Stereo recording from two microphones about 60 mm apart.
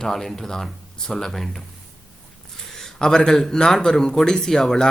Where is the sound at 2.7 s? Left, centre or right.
Centre.